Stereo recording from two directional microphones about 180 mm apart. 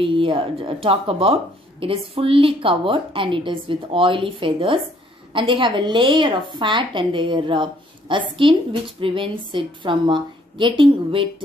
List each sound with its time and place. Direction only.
0.0 s a woman's voice: 30° right (ahead or behind)